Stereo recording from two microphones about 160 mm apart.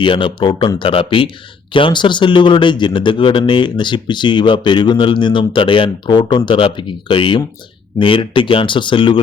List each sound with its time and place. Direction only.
0.0 s speech: 30° left (ahead or behind)